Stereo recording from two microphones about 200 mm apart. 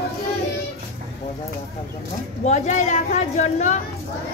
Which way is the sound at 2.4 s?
35° left (ahead or behind).